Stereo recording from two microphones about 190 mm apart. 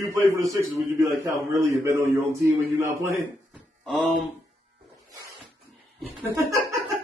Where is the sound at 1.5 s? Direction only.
15° right (ahead or behind).